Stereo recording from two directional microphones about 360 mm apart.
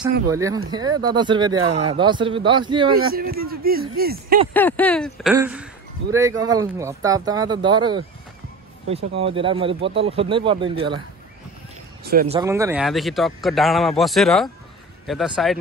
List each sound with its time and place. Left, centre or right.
0.3 s speech: centre
2.9 s speech: right
4.6 s speech: centre
9.2 s speech: centre
12.0 s speech: right
12.4 s speech: centre